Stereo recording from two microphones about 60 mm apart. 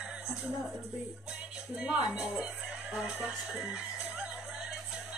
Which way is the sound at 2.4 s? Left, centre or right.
Centre.